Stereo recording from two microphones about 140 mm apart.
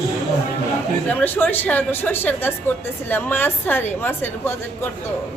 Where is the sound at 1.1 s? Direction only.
15° left (ahead or behind).